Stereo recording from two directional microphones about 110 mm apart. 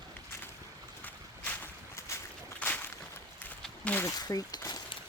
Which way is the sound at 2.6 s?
15° left (ahead or behind).